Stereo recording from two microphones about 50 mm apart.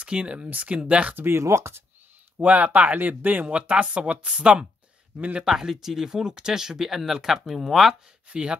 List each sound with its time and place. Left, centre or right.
0.0 s speech: right
1.1 s speech: right
1.4 s speech: right
2.3 s speech: right
3.4 s speech: right
5.4 s speech: centre
7.9 s speech: centre